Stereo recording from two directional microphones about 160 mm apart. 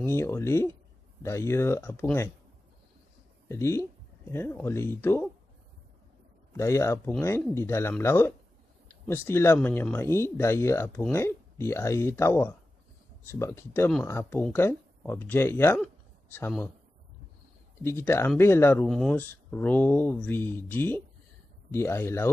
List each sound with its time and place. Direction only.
0.0 s speech: 15° left (ahead or behind)
3.4 s speech: 15° left (ahead or behind)
6.5 s speech: 20° left (ahead or behind)
17.8 s speech: 15° left (ahead or behind)
18.9 s speech: 5° left (ahead or behind)